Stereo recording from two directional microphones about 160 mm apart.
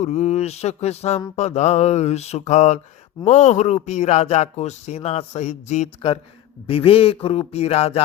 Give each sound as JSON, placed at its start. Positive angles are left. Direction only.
{"t": 0.0, "sound": "speech", "side_deg": 45}
{"t": 6.7, "sound": "music", "side_deg": 35}